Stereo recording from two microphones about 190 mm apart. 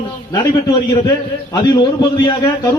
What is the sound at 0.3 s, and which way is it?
A man's voice, 20° left (ahead or behind).